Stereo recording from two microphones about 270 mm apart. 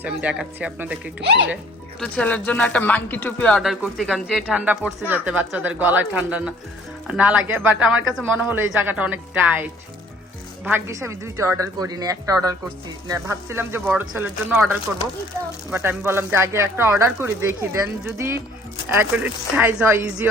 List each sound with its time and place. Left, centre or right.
0.0 s speech: centre
1.2 s speech: right
2.0 s a woman's voice: centre